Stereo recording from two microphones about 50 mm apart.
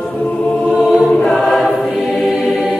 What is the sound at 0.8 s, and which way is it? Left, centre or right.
Choir, centre.